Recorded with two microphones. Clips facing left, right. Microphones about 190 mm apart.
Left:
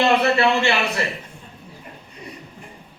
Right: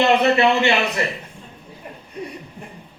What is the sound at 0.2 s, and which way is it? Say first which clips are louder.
Speech: right 2 dB; 20° right (ahead or behind).